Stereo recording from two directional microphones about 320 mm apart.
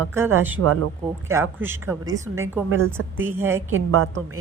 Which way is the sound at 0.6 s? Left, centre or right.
Right.